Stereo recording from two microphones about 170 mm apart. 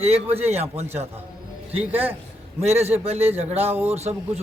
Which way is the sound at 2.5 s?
40° right (ahead or behind).